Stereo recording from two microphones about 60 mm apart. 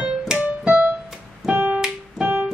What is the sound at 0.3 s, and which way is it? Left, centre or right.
Music, centre.